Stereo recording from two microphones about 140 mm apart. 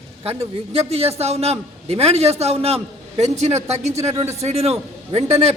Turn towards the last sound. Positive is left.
turn(degrees=-50)  # may be behind; listen again after turning